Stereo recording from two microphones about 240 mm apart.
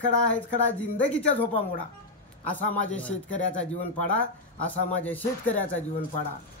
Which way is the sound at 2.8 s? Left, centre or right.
Centre.